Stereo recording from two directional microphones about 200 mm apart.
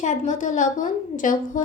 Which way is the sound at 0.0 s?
40° left (ahead or behind).